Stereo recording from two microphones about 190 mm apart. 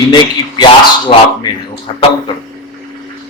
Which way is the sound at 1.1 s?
35° left (ahead or behind).